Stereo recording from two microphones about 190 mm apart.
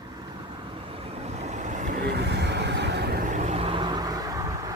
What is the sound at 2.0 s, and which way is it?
Vehicle, 60° right (ahead or behind).